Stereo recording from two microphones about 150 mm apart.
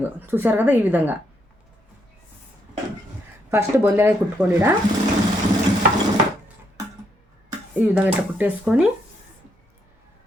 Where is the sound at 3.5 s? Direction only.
15° right (ahead or behind).